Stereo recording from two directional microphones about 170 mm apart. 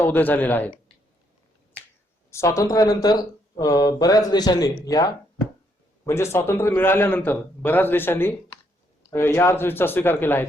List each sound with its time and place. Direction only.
0.0 s a man's voice: 10° left (ahead or behind)
2.3 s a man's voice: 15° left (ahead or behind)